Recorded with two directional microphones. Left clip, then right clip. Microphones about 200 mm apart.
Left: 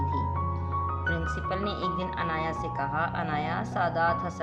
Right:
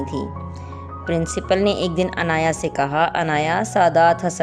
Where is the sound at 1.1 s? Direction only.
40° right (ahead or behind).